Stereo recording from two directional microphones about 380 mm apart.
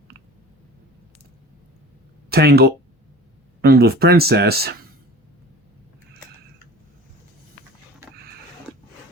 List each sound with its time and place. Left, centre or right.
2.3 s speech: right